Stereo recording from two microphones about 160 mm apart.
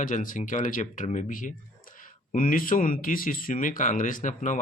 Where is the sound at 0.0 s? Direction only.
55° left (ahead or behind).